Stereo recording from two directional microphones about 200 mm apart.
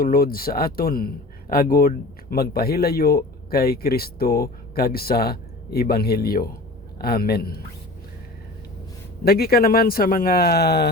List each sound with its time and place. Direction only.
0.0 s speech: 45° left (ahead or behind)
9.2 s speech: 50° left (ahead or behind)